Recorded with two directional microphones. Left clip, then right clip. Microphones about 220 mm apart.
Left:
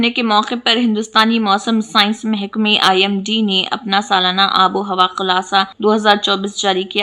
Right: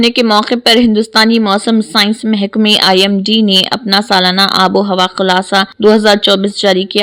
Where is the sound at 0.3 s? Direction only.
25° right (ahead or behind).